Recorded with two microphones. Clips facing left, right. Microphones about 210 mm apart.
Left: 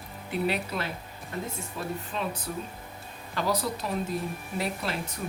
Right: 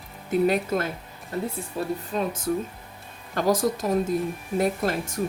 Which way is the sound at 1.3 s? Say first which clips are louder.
Right 6 dB; 35° right (ahead or behind).